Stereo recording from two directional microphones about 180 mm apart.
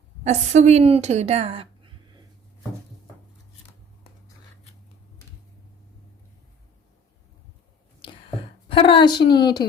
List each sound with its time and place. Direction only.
0.3 s a woman's voice: 40° right (ahead or behind)
8.7 s a woman's voice: 30° left (ahead or behind)